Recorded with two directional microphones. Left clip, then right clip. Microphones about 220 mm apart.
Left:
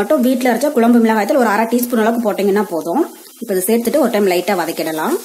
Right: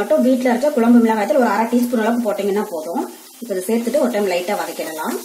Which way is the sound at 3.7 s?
40° left (ahead or behind).